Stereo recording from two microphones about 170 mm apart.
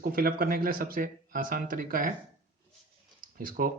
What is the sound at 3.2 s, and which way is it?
Speech, 55° right (ahead or behind).